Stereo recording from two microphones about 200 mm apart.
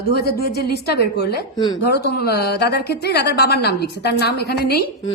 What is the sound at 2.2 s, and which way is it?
A woman's voice, 55° left (ahead or behind).